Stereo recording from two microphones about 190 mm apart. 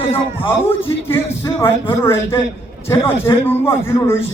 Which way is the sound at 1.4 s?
15° left (ahead or behind).